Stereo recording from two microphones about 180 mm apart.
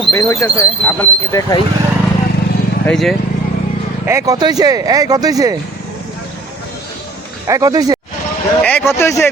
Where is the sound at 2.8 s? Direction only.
5° left (ahead or behind).